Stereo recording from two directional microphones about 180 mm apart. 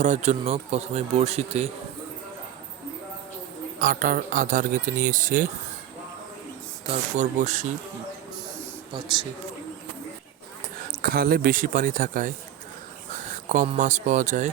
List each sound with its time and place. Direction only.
0.0 s speech: 40° right (ahead or behind)
3.8 s speech: 50° right (ahead or behind)
6.8 s speech: 35° right (ahead or behind)
11.0 s speech: 55° right (ahead or behind)
13.7 s speech: 45° right (ahead or behind)